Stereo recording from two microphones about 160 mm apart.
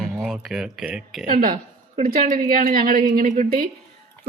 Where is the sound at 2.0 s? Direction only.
60° right (ahead or behind).